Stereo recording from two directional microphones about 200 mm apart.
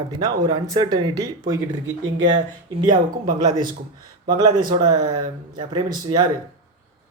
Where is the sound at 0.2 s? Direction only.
20° right (ahead or behind).